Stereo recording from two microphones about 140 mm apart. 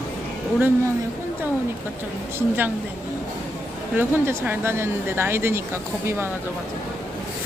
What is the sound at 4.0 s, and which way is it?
Speech, 15° right (ahead or behind).